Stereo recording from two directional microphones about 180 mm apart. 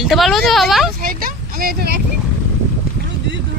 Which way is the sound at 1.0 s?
50° right (ahead or behind).